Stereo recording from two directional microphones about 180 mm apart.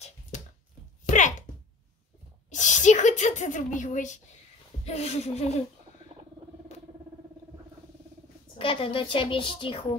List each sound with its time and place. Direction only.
1.0 s a sound: 45° left (ahead or behind)
2.5 s speech: 40° left (ahead or behind)
8.5 s a woman's voice: 30° left (ahead or behind)